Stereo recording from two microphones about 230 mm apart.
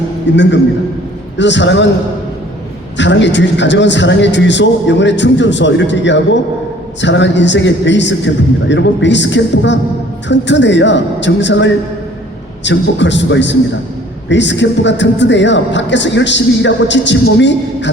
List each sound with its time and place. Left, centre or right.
0.3 s speech: left
3.0 s speech: left